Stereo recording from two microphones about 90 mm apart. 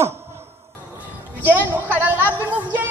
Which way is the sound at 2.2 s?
20° left (ahead or behind).